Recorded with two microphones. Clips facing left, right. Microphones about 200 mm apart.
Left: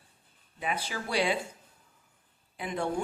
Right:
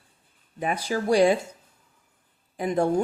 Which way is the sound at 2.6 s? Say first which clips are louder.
Right 9 dB; 40° right (ahead or behind).